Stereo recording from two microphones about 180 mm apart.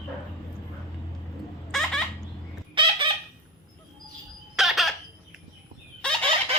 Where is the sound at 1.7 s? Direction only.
Centre (ahead or behind).